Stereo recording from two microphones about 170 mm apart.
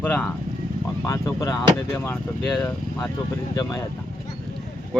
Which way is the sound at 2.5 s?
5° left (ahead or behind).